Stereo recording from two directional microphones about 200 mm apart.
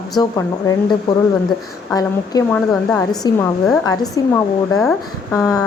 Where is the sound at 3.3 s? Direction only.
20° left (ahead or behind).